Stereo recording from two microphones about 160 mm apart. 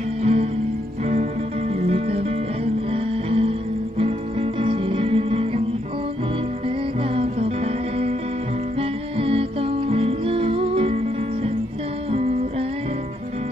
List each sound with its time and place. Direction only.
0.2 s music: 40° right (ahead or behind)
1.8 s music: 40° right (ahead or behind)
7.2 s music: 35° right (ahead or behind)
9.2 s music: 35° right (ahead or behind)
12.1 s music: 40° right (ahead or behind)